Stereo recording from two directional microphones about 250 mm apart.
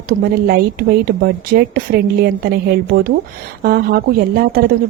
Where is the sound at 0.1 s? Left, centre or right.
Right.